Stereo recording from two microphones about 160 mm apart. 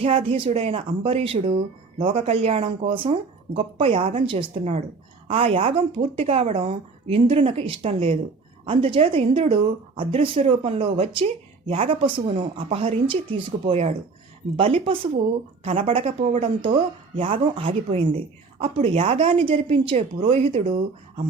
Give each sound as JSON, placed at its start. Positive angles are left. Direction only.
{"t": 0.0, "sound": "speech", "side_deg": -35}